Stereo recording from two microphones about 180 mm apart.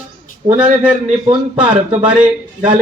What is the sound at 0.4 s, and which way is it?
Speech, 35° right (ahead or behind).